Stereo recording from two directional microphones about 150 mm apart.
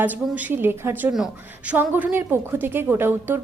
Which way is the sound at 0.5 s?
15° right (ahead or behind).